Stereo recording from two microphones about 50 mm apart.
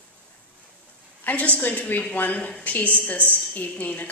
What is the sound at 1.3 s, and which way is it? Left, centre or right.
A woman's voice, left.